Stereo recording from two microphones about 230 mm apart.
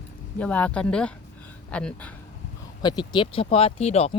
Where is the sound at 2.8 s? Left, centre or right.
Centre.